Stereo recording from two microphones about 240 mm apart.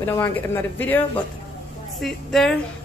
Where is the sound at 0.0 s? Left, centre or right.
Centre.